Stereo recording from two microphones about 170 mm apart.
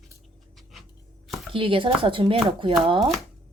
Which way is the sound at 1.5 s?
30° right (ahead or behind).